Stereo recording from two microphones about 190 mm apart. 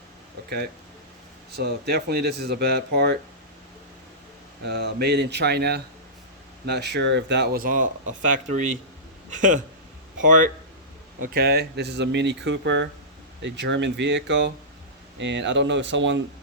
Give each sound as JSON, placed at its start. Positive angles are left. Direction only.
{"t": 1.5, "sound": "speech", "side_deg": -60}
{"t": 4.6, "sound": "speech", "side_deg": -60}
{"t": 11.3, "sound": "speech", "side_deg": -55}